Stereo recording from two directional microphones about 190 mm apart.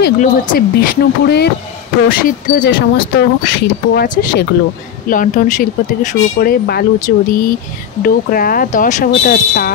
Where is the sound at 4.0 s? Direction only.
55° left (ahead or behind).